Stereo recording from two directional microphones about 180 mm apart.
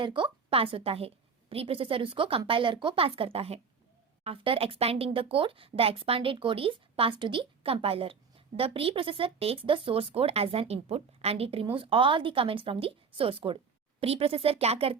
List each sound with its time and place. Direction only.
0.0 s speech: 25° right (ahead or behind)